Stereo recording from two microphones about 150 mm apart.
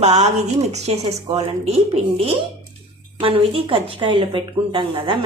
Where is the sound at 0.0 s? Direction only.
45° right (ahead or behind).